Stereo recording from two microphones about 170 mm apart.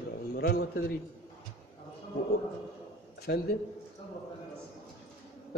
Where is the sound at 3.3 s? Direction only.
75° left (ahead or behind).